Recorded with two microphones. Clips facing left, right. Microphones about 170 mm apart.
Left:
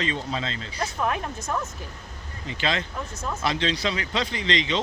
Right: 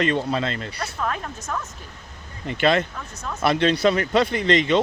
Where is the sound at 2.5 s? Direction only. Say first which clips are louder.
Right 8 dB; 55° right (ahead or behind).